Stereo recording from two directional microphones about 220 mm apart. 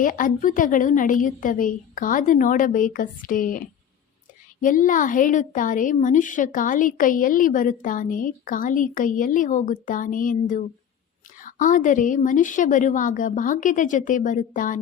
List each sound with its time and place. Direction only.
0.0 s a woman's voice: 35° left (ahead or behind)
4.6 s a woman's voice: 35° left (ahead or behind)